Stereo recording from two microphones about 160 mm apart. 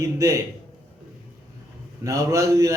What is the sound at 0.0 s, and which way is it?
Speech, 20° right (ahead or behind).